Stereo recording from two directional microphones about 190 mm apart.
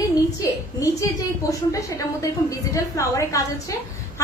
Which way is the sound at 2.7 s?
15° left (ahead or behind).